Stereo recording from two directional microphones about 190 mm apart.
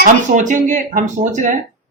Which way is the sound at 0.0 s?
40° right (ahead or behind).